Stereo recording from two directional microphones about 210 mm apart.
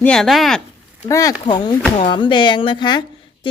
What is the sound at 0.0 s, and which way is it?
Speech, centre (ahead or behind).